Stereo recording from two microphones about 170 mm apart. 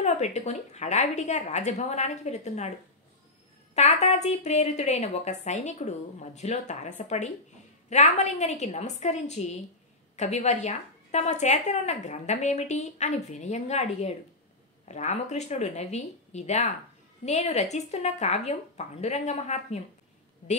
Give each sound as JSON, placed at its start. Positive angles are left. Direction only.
{"t": 0.0, "sound": "a woman's voice", "side_deg": 40}
{"t": 3.7, "sound": "a woman's voice", "side_deg": 40}